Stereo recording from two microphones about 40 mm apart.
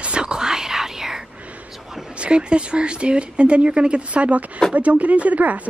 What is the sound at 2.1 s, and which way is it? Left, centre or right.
A woman's voice, right.